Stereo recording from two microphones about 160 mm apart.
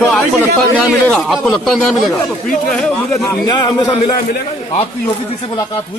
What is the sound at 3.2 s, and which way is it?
Speech, 25° left (ahead or behind).